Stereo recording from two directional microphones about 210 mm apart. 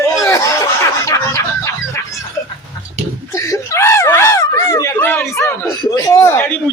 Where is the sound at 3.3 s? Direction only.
15° left (ahead or behind).